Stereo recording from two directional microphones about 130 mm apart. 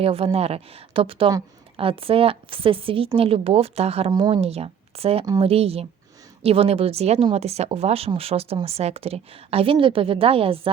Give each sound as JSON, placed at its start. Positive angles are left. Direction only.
{"t": 0.0, "sound": "speech", "side_deg": -50}